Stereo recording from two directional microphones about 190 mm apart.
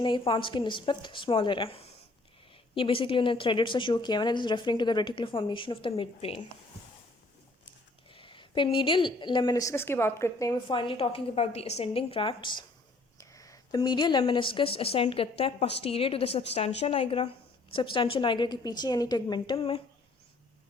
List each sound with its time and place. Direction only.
0.0 s a woman's voice: 25° left (ahead or behind)
8.1 s a woman's voice: 25° left (ahead or behind)